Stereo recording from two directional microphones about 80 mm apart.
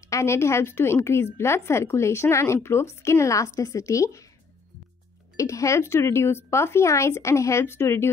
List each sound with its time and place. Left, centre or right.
0.0 s a woman's voice: left
5.3 s a woman's voice: left